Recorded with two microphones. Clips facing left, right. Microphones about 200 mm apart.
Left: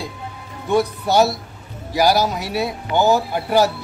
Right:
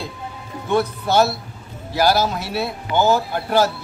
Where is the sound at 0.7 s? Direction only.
15° left (ahead or behind).